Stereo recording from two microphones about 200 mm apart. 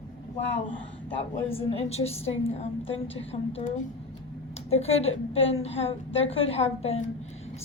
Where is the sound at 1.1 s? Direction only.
30° left (ahead or behind).